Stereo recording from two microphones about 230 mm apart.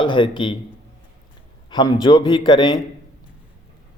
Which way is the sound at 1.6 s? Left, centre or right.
Centre.